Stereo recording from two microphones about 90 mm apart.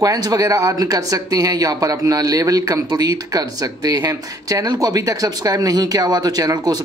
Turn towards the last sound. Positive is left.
turn(degrees=-45)  # may be behind; listen again after turning